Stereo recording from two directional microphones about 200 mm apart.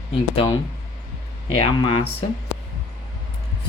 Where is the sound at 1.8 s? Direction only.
30° left (ahead or behind).